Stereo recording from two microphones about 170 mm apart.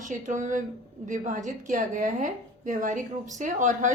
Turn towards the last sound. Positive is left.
turn(degrees=-50)  # may be behind; listen again after turning